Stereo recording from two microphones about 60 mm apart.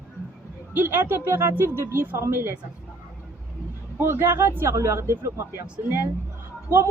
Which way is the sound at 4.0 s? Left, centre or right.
Right.